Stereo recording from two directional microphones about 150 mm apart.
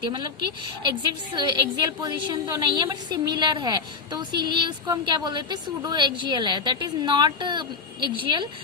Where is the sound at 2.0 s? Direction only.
30° right (ahead or behind).